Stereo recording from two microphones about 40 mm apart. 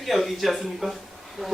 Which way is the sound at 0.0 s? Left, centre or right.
Centre.